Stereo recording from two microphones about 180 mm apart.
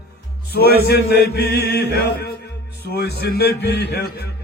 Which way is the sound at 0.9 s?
65° left (ahead or behind).